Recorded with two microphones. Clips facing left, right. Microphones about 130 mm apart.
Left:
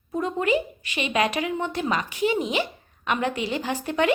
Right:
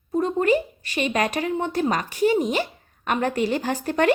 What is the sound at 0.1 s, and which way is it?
A woman's voice, 35° right (ahead or behind).